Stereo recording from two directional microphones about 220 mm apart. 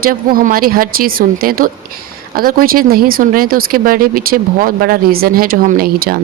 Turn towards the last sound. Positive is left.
turn(degrees=-40)  # may be behind; listen again after turning